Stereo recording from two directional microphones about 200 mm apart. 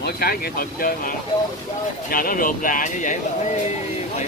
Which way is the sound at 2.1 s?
45° left (ahead or behind).